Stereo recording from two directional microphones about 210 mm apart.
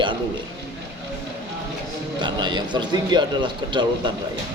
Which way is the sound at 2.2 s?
20° right (ahead or behind).